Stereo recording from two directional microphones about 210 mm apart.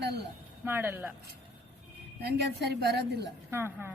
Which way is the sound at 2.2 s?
50° right (ahead or behind).